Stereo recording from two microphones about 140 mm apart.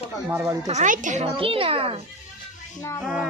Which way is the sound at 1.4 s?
40° right (ahead or behind).